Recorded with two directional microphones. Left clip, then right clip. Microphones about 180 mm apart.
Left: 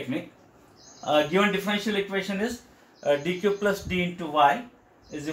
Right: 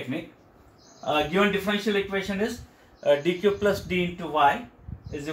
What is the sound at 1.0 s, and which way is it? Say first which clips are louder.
Speech: left 1 dB; 15° right (ahead or behind).